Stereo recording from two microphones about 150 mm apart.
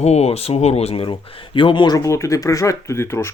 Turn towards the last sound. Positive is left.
turn(degrees=15)  # may be behind; listen again after turning